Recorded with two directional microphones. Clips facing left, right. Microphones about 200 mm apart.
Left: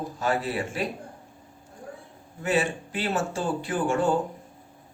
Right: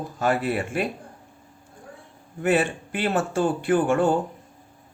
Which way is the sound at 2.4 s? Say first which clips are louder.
Right 4 dB; 55° right (ahead or behind).